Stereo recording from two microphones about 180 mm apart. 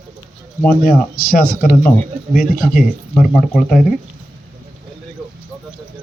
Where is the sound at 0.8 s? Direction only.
50° left (ahead or behind).